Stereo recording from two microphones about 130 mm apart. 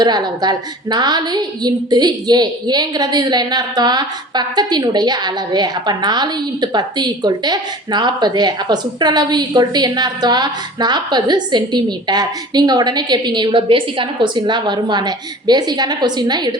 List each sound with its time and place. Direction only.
0.0 s a woman's voice: 35° right (ahead or behind)